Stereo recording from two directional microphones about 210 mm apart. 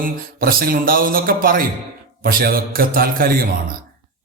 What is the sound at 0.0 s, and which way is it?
A man's voice, 45° right (ahead or behind).